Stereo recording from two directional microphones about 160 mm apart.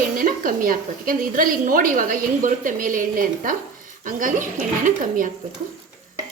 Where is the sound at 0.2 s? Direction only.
60° right (ahead or behind).